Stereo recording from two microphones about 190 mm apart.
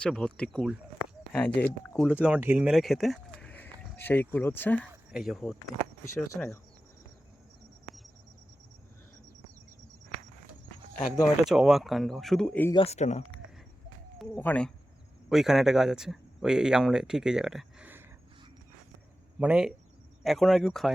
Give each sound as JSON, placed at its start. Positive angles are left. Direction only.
{"t": 0.0, "sound": "speech", "side_deg": 5}
{"t": 2.2, "sound": "speech", "side_deg": -10}
{"t": 5.1, "sound": "speech", "side_deg": 0}
{"t": 6.1, "sound": "speech", "side_deg": 10}
{"t": 11.4, "sound": "speech", "side_deg": -5}
{"t": 12.7, "sound": "speech", "side_deg": 35}
{"t": 14.2, "sound": "speech", "side_deg": 5}
{"t": 19.4, "sound": "speech", "side_deg": -5}